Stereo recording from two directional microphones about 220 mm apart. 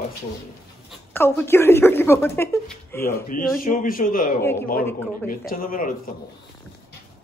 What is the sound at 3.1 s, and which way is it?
Speech, 40° left (ahead or behind).